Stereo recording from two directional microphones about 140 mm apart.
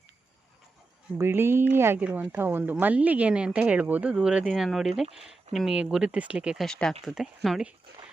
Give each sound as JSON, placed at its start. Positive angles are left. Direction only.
{"t": 1.2, "sound": "speech", "side_deg": -15}